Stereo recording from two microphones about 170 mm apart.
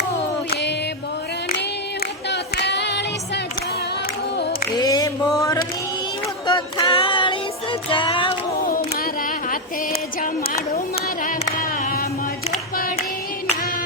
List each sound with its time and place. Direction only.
2.3 s music: 90° left
4.8 s a sound: 20° left (ahead or behind)
6.5 s music: 25° left (ahead or behind)